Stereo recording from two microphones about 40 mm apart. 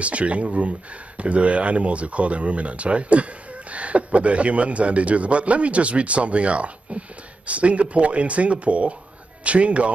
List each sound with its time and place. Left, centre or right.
0.0 s a man's voice: right